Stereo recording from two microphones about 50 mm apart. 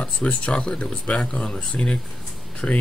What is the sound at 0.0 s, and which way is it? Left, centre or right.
Speech, left.